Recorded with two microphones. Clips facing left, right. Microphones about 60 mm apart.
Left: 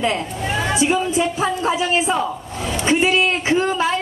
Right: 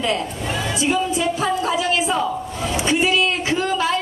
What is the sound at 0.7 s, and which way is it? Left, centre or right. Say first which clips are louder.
Speech: left 1 dB; left.